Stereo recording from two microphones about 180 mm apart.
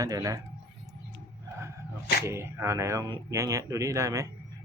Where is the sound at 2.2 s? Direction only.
15° right (ahead or behind).